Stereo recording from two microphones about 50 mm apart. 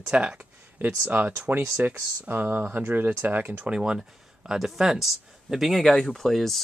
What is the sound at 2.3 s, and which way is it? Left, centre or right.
Speech, right.